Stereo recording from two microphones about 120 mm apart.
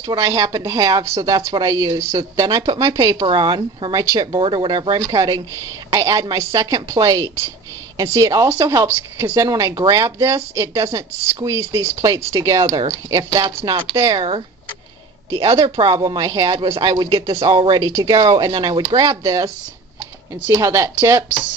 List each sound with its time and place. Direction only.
0.0 s a woman's voice: 30° right (ahead or behind)
15.5 s speech: 45° right (ahead or behind); by 16.5 s 30° right (ahead or behind)
16.5 s a man's voice: 45° right (ahead or behind); by 21.5 s 20° right (ahead or behind)